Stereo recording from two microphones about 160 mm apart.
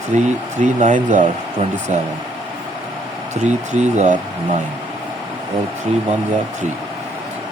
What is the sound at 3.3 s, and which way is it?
Speech, 45° right (ahead or behind).